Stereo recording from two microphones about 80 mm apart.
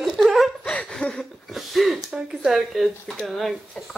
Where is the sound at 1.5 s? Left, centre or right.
Centre.